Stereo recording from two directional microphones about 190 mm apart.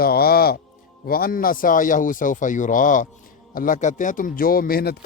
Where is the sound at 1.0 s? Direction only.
50° left (ahead or behind).